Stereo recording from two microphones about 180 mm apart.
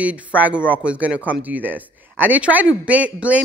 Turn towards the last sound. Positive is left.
turn(degrees=-10)  # may be behind; listen again after turning